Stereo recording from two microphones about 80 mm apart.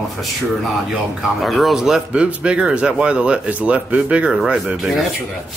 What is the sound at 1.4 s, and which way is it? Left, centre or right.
Speech, centre.